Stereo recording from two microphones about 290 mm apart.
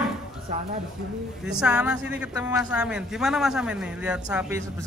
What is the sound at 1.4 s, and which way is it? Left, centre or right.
A man's voice, centre.